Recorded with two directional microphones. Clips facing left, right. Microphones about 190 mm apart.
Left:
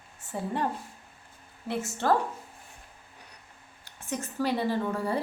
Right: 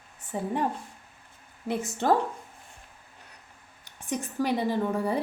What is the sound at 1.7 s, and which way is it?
Speech, 15° right (ahead or behind).